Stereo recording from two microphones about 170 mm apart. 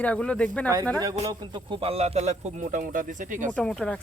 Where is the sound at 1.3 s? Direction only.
30° right (ahead or behind); by 3.5 s 50° right (ahead or behind).